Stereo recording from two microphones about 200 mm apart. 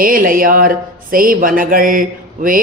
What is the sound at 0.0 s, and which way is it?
Speech, 45° right (ahead or behind).